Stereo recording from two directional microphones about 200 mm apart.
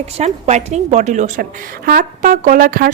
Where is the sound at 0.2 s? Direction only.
35° right (ahead or behind).